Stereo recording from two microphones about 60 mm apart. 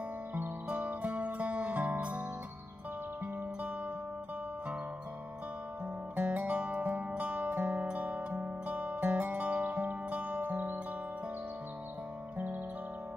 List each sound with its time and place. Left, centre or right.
0.7 s music: centre
6.1 s music: right